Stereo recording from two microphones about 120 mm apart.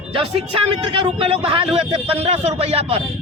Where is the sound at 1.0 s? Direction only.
50° right (ahead or behind).